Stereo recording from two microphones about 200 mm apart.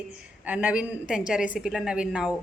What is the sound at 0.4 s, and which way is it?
A woman's voice, 5° right (ahead or behind).